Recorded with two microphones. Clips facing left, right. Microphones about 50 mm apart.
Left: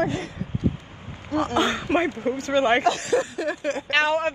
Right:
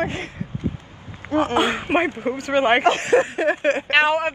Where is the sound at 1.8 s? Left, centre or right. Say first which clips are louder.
Right 2 dB; right.